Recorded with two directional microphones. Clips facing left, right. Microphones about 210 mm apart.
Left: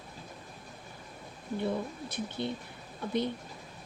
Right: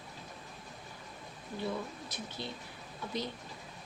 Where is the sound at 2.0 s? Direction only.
55° left (ahead or behind).